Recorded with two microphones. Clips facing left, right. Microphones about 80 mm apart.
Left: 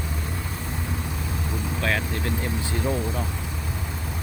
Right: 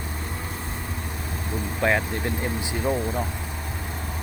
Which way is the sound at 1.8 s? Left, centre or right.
Right.